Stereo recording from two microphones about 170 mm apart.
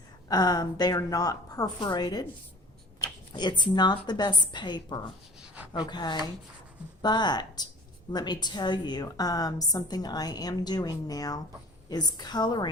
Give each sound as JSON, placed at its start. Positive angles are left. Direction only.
{"t": 0.3, "sound": "a woman's voice", "side_deg": 25}